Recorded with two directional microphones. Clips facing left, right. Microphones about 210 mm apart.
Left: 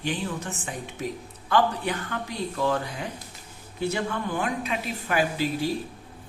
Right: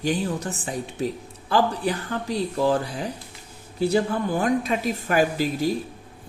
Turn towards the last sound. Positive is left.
turn(degrees=-40)  # may be behind; listen again after turning